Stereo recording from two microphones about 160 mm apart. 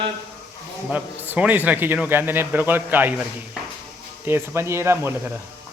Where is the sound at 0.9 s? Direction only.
10° right (ahead or behind).